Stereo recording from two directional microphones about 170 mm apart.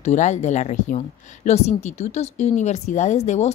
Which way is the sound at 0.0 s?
45° left (ahead or behind).